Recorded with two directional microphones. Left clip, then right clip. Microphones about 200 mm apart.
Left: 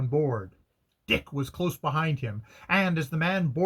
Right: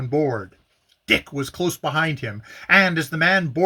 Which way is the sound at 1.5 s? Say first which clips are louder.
Right 6 dB; 10° right (ahead or behind).